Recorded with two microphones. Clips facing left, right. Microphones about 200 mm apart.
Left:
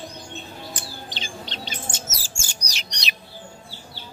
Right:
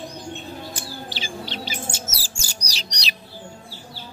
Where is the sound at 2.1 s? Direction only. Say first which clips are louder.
Right 2 dB; 35° right (ahead or behind).